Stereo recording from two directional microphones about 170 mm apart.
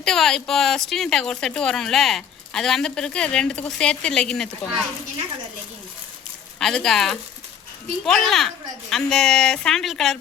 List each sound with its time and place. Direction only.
0.0 s speech: 5° left (ahead or behind)
6.6 s speech: 5° left (ahead or behind)